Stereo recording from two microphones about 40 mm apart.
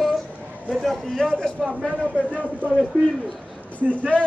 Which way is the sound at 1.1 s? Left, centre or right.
Centre.